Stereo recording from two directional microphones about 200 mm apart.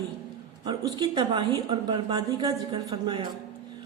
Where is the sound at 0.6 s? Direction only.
20° right (ahead or behind).